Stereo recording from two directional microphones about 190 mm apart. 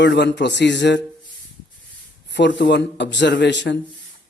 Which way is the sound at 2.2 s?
65° left (ahead or behind).